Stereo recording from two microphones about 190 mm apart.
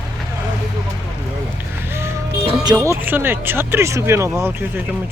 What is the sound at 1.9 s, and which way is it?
Music, 15° right (ahead or behind).